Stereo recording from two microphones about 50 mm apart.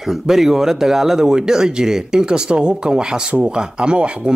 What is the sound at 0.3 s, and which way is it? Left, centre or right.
Speech, centre.